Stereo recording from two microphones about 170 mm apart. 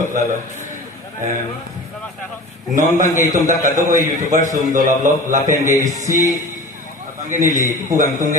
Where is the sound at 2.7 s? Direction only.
50° right (ahead or behind).